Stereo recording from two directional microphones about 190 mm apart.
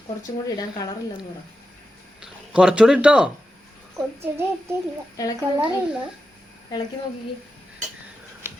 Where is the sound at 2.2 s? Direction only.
5° right (ahead or behind).